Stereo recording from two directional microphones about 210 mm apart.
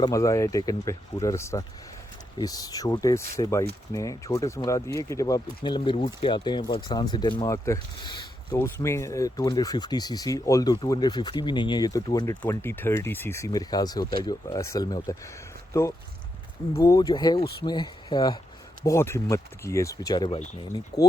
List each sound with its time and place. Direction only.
0.0 s speech: 15° left (ahead or behind)
16.8 s speech: 15° left (ahead or behind)